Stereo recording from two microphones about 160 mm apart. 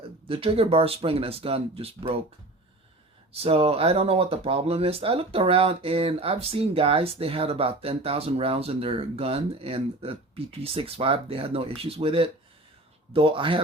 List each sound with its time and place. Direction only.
0.3 s speech: 35° right (ahead or behind)
3.3 s speech: 35° right (ahead or behind)